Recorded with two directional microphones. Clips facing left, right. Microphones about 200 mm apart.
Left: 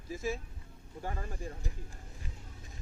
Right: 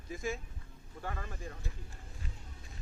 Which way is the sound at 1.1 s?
30° left (ahead or behind).